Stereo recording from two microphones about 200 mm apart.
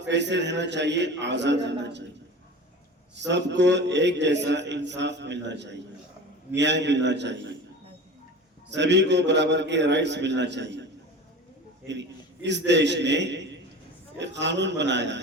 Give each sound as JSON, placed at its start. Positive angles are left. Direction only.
{"t": 0.0, "sound": "a man's voice", "side_deg": -60}
{"t": 3.2, "sound": "a man's voice", "side_deg": -60}
{"t": 8.7, "sound": "a man's voice", "side_deg": -60}
{"t": 11.9, "sound": "a man's voice", "side_deg": -60}